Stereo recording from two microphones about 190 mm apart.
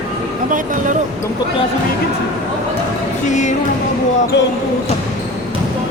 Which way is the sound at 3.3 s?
40° left (ahead or behind).